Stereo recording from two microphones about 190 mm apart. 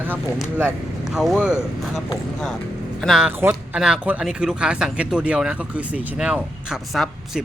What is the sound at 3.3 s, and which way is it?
Speech, 10° right (ahead or behind).